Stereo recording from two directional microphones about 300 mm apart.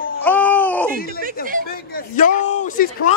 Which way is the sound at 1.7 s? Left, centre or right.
Left.